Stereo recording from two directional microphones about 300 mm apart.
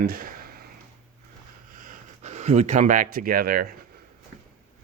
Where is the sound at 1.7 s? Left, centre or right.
Right.